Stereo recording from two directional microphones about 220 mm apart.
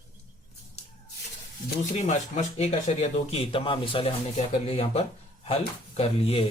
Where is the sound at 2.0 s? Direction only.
30° left (ahead or behind).